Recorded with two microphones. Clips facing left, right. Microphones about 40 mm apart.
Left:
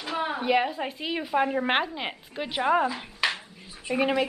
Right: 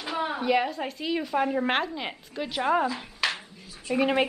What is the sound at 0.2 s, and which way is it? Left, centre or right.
A woman's voice, centre.